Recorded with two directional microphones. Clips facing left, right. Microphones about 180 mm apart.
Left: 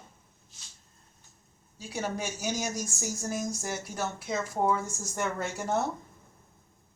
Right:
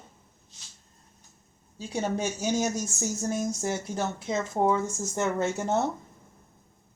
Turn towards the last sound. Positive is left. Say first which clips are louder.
# right 5 dB
turn(degrees=-25)  # may be behind; listen again after turning